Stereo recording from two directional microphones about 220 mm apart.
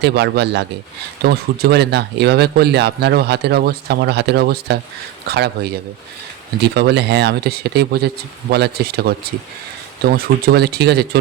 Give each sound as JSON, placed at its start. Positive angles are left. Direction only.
{"t": 0.0, "sound": "speech", "side_deg": -50}